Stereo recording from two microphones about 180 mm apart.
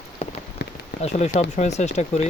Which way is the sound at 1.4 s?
40° left (ahead or behind).